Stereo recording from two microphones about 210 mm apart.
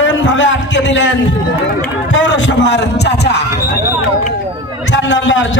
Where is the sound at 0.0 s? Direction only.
60° left (ahead or behind).